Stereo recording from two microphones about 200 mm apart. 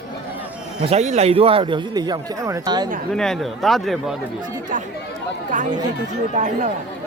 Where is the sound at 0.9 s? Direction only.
35° right (ahead or behind).